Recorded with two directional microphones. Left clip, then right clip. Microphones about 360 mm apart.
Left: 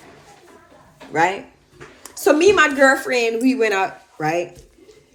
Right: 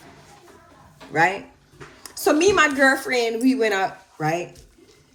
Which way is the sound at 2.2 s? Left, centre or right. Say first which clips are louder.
Left 3 dB; centre.